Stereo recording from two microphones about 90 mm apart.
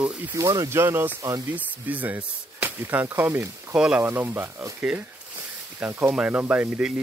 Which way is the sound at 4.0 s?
25° right (ahead or behind).